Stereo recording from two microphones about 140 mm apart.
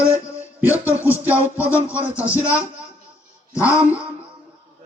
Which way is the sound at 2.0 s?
10° right (ahead or behind).